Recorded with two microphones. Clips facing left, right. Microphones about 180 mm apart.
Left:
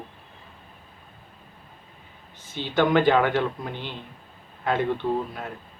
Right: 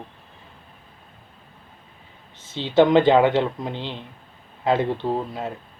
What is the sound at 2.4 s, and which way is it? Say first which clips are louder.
Speech: right 6 dB; 25° right (ahead or behind).